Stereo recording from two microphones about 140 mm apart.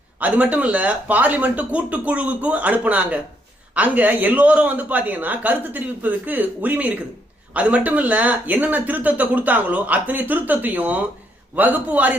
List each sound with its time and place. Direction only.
0.2 s speech: 10° right (ahead or behind)